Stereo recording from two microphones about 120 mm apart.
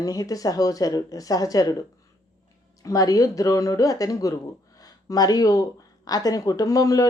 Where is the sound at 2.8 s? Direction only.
30° left (ahead or behind).